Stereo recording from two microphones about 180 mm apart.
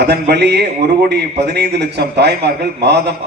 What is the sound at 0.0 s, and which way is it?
A man's voice, 65° right (ahead or behind).